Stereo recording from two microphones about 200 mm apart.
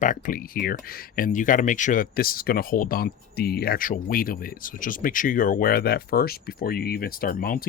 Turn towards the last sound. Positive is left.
turn(degrees=45)  # may be behind; listen again after turning